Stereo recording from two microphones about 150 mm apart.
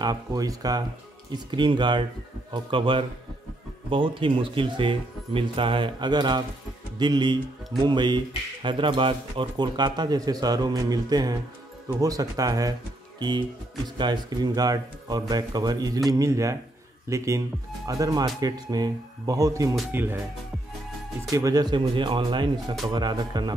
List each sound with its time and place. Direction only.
0.0 s speech: 25° right (ahead or behind)
13.9 s speech: 30° right (ahead or behind); by 20.2 s 15° right (ahead or behind)
21.3 s speech: 20° right (ahead or behind)